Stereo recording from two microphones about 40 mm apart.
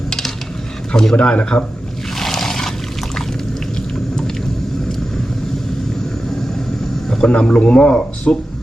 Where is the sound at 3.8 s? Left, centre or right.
Centre.